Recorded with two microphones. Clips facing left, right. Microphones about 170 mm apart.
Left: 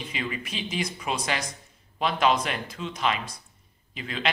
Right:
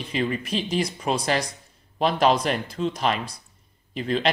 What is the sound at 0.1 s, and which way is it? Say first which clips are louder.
Speech: right 10 dB; 35° right (ahead or behind).